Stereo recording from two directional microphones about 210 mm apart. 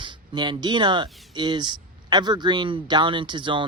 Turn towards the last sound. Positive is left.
turn(degrees=-20)  # may be behind; listen again after turning